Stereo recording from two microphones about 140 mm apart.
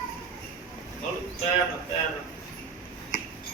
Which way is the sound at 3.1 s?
90° left.